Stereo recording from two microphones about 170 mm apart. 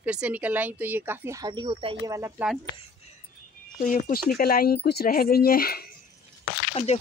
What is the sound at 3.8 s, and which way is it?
Speech, 50° left (ahead or behind).